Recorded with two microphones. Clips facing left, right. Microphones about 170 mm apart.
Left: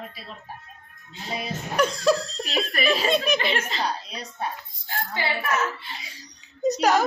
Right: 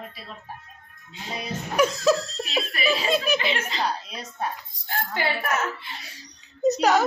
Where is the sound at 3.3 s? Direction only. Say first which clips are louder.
Left 1 dB; 40° left (ahead or behind).